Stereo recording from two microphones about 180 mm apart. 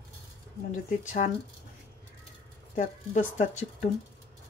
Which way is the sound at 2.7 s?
40° left (ahead or behind).